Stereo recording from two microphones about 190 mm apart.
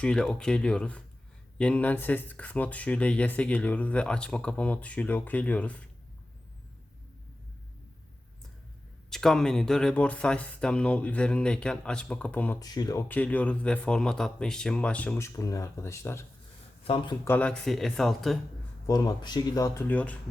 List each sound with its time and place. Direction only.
0.0 s speech: 5° left (ahead or behind)
9.0 s speech: centre (ahead or behind)
12.6 s speech: 20° left (ahead or behind)
16.8 s speech: 25° left (ahead or behind)
17.2 s speech: 10° left (ahead or behind)
18.9 s speech: 20° left (ahead or behind)